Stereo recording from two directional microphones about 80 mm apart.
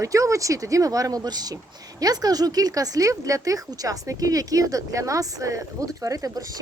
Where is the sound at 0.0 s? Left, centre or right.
Right.